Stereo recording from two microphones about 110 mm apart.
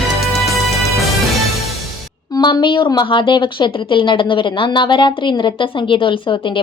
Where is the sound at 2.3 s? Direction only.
45° left (ahead or behind).